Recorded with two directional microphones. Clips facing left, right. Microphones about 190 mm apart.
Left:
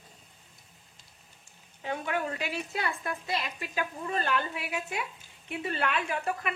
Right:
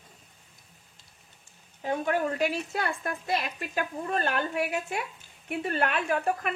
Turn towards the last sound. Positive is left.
turn(degrees=-45)  # may be behind; listen again after turning